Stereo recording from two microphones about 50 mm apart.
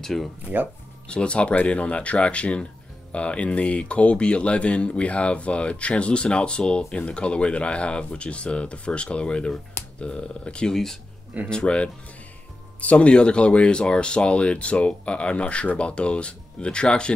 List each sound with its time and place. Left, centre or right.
0.0 s speech: centre
1.0 s speech: left
10.7 s speech: centre
11.5 s speech: left